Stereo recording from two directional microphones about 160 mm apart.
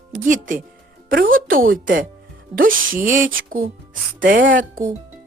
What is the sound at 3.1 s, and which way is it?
Speech, 55° right (ahead or behind).